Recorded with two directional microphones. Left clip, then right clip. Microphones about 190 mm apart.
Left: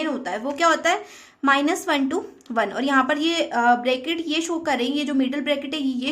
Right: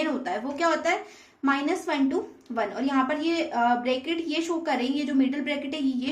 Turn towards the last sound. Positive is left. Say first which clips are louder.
# left 3 dB
turn(degrees=30)  # may be behind; listen again after turning